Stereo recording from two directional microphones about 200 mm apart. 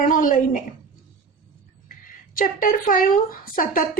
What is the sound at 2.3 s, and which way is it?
A woman's voice, 45° left (ahead or behind).